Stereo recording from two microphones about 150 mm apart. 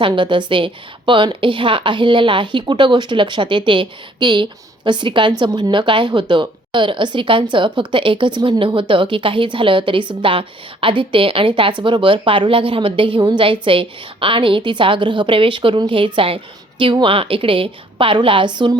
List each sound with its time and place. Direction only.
0.0 s a woman's voice: 35° right (ahead or behind)